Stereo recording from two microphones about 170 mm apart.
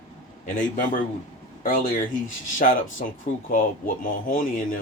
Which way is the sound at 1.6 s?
55° left (ahead or behind).